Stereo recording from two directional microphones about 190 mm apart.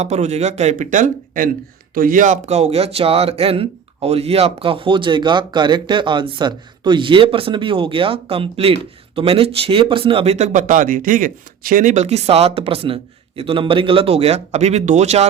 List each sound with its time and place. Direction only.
0.0 s speech: 35° right (ahead or behind)